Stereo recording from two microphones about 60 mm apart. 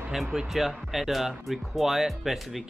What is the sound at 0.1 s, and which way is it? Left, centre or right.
Speech, centre.